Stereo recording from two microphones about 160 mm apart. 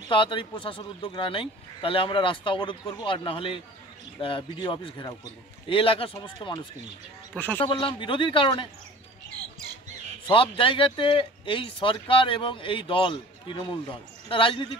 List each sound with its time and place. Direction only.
0.1 s speech: 30° left (ahead or behind)
7.3 s speech: 10° left (ahead or behind)
7.6 s speech: 30° left (ahead or behind)
10.2 s speech: 35° left (ahead or behind)